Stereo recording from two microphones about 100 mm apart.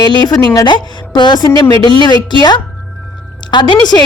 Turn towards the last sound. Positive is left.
turn(degrees=45)  # may be behind; listen again after turning